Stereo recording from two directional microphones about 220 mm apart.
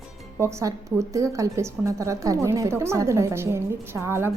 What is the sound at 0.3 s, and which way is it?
A woman's voice, 10° right (ahead or behind).